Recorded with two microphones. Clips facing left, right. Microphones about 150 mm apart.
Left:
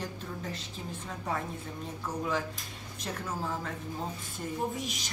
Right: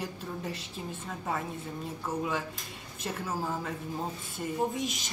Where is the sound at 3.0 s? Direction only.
5° right (ahead or behind).